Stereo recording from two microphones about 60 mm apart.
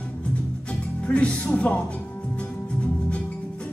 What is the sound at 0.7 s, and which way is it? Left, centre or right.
Music, centre.